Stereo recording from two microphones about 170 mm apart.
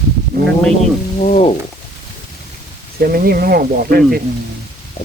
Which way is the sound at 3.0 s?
60° right (ahead or behind).